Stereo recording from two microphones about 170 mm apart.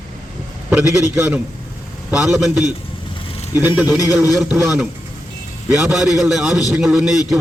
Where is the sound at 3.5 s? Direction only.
10° right (ahead or behind).